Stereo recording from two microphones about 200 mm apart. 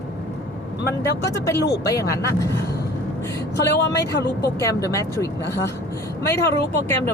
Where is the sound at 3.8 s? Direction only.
55° left (ahead or behind).